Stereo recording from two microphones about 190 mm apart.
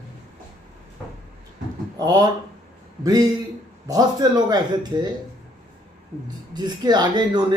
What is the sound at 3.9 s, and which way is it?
Speech, 20° right (ahead or behind).